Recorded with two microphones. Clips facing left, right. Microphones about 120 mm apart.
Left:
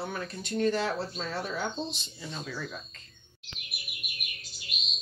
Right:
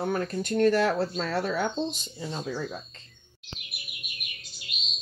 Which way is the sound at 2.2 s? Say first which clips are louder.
Right 6 dB; 30° right (ahead or behind).